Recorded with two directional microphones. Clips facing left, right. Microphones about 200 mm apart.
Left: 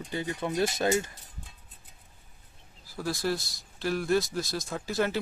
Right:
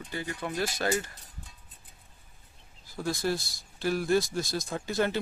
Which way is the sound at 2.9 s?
Centre (ahead or behind).